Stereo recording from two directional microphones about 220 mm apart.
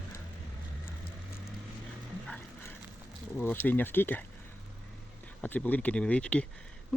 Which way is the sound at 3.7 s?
10° left (ahead or behind).